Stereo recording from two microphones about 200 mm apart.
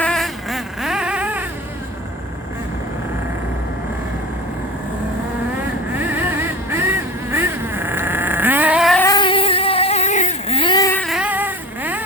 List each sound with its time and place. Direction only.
0.0 s vehicle: centre (ahead or behind)
6.0 s vehicle: 10° right (ahead or behind)
9.0 s vehicle: 20° left (ahead or behind)
11.0 s vehicle: 5° right (ahead or behind)